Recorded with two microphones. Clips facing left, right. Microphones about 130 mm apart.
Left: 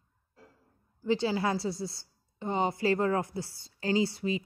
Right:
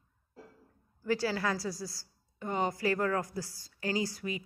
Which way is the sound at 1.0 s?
20° left (ahead or behind).